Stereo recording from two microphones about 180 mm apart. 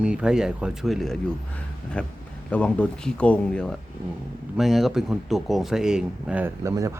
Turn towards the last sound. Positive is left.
turn(degrees=-15)  # may be behind; listen again after turning